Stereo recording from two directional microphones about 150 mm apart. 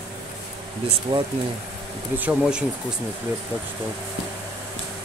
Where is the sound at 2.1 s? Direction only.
10° right (ahead or behind).